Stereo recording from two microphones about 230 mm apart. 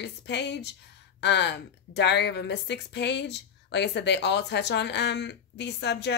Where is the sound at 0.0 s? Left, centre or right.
Left.